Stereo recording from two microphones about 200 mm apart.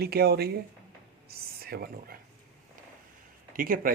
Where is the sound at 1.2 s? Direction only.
50° right (ahead or behind).